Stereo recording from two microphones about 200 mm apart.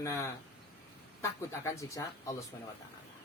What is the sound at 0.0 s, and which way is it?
Speech, 15° left (ahead or behind).